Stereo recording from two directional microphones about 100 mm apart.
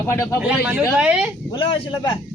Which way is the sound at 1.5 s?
55° left (ahead or behind).